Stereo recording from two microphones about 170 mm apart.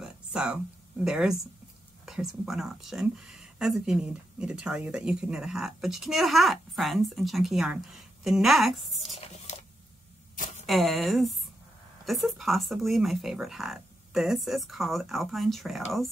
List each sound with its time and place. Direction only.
0.0 s a sound: 5° right (ahead or behind)
2.0 s speech: centre (ahead or behind)
9.5 s printer: 40° left (ahead or behind)
10.7 s speech: centre (ahead or behind)